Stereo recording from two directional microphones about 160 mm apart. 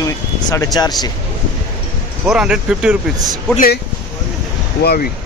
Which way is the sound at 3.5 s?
65° left (ahead or behind).